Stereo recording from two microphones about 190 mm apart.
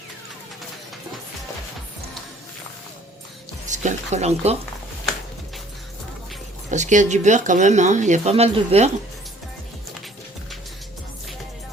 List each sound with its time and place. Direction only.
3.7 s speech: 40° right (ahead or behind)
6.7 s speech: 40° right (ahead or behind)